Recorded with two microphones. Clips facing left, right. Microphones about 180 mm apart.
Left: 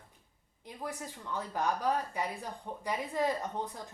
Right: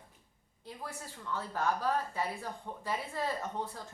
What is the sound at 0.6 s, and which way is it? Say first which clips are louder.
Speech: left 3 dB; 15° left (ahead or behind).